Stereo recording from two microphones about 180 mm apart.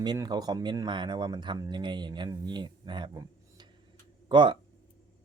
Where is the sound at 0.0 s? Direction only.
25° right (ahead or behind).